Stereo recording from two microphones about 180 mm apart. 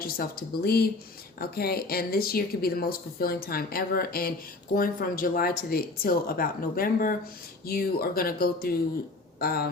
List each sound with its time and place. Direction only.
0.0 s speech: 55° left (ahead or behind)